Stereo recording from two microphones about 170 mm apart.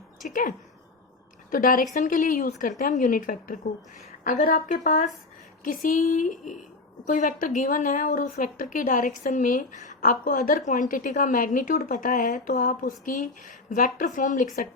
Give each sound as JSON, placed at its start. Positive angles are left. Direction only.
{"t": 0.3, "sound": "a woman's voice", "side_deg": 50}